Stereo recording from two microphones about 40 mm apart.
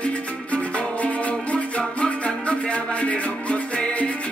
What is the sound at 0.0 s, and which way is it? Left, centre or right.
Music, left.